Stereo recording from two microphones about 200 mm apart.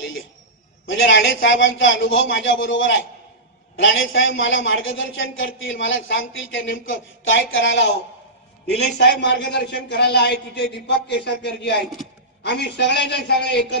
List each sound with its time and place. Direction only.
0.8 s a man's voice: 70° left (ahead or behind)
8.9 s a man's voice: 55° left (ahead or behind)